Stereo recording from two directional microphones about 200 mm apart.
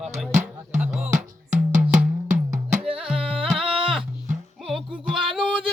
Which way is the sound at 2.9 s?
Centre (ahead or behind).